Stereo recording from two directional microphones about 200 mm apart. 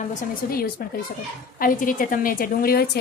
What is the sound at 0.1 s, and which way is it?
Speech, 45° left (ahead or behind).